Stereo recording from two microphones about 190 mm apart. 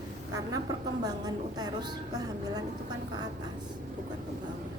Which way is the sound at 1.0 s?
20° right (ahead or behind).